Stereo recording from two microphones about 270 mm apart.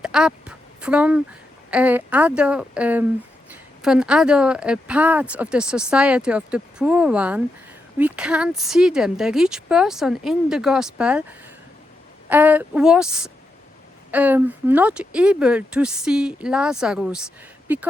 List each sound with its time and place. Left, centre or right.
0.0 s a woman's voice: centre
12.3 s a woman's voice: centre